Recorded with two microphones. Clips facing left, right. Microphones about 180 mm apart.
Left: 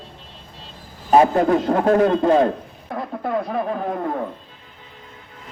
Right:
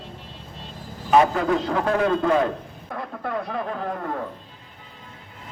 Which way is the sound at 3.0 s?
20° left (ahead or behind).